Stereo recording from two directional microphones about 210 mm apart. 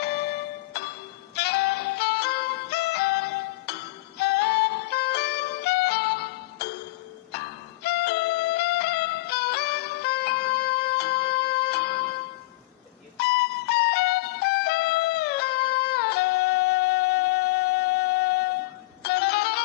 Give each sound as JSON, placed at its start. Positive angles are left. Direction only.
{"t": 0.0, "sound": "music", "side_deg": 50}
{"t": 13.1, "sound": "music", "side_deg": 50}